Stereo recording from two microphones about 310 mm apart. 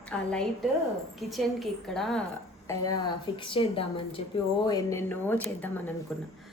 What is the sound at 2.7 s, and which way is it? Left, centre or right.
A woman's voice, centre.